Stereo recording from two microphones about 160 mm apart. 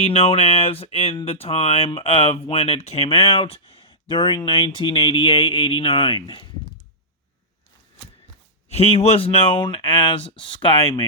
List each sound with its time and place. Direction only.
0.0 s speech: 40° left (ahead or behind)
8.7 s speech: 40° left (ahead or behind)